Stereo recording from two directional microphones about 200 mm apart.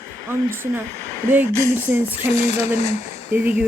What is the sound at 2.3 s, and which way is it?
Speech, 30° left (ahead or behind).